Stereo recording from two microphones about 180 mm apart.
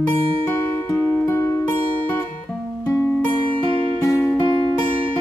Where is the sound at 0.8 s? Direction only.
15° left (ahead or behind).